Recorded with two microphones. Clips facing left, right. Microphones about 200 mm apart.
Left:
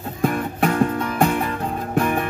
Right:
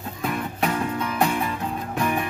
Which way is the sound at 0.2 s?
50° left (ahead or behind).